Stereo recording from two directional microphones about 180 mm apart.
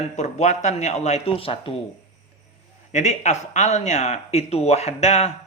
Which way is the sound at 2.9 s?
40° left (ahead or behind).